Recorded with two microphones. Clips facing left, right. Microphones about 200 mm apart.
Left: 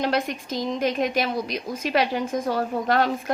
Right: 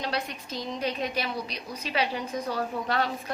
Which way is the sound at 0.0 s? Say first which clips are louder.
Left 8 dB; 90° left.